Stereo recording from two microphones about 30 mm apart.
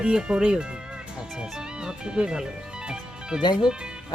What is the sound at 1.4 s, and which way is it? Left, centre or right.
Music, right.